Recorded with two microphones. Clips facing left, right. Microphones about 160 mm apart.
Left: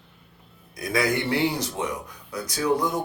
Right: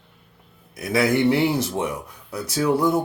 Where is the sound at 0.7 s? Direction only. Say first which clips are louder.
Right 4 dB; 25° right (ahead or behind).